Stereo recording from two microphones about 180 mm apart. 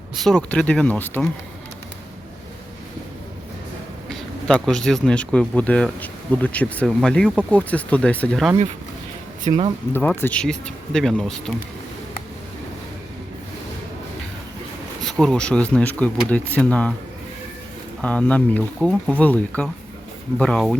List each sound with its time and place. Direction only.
0.2 s speech: 5° left (ahead or behind)
4.1 s speech: 5° left (ahead or behind)
9.5 s speech: 25° right (ahead or behind)
9.9 s speech: 10° left (ahead or behind)
15.0 s speech: centre (ahead or behind)
18.0 s speech: 5° left (ahead or behind)